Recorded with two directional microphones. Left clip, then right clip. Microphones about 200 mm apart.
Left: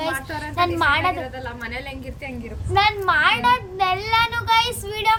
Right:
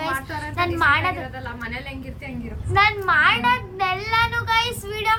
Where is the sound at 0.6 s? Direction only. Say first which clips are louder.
Even; 5° left (ahead or behind).